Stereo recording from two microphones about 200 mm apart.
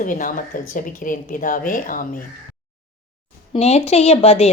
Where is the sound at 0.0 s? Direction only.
40° left (ahead or behind).